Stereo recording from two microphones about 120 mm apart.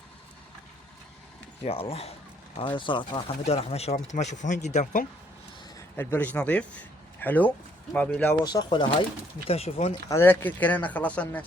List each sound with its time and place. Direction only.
1.6 s speech: 55° left (ahead or behind)
2.6 s speech: 45° left (ahead or behind)
3.4 s speech: 60° left (ahead or behind); by 4.9 s 85° left
6.0 s speech: 15° left (ahead or behind)
8.4 s speech: 40° left (ahead or behind)
9.5 s speech: 60° left (ahead or behind)
10.1 s speech: 20° left (ahead or behind)